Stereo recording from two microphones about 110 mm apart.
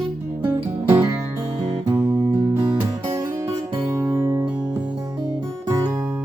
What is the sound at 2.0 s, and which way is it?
Music, 20° right (ahead or behind).